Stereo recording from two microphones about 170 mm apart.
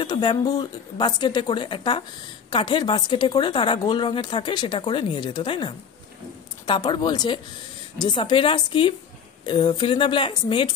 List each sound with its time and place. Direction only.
0.0 s a woman's voice: 25° left (ahead or behind)